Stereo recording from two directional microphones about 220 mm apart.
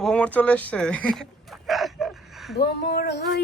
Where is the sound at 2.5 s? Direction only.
45° left (ahead or behind).